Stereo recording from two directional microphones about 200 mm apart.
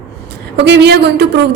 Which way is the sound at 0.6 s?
55° right (ahead or behind).